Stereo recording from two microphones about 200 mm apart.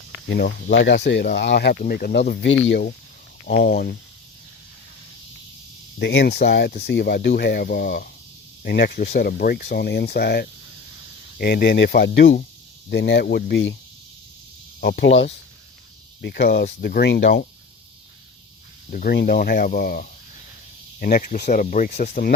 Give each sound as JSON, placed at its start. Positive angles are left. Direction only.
{"t": 0.3, "sound": "speech", "side_deg": 55}
{"t": 6.0, "sound": "speech", "side_deg": 55}
{"t": 14.8, "sound": "speech", "side_deg": 50}
{"t": 18.9, "sound": "speech", "side_deg": 50}